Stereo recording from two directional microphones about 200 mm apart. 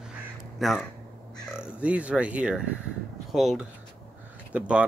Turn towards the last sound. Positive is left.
turn(degrees=-5)  # may be behind; listen again after turning